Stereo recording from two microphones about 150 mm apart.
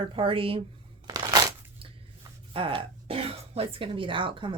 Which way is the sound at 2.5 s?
35° right (ahead or behind).